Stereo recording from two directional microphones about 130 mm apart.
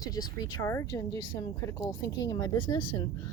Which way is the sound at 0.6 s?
20° left (ahead or behind).